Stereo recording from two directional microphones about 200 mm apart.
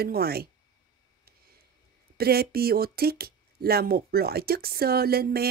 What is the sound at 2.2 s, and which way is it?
Speech, 50° right (ahead or behind).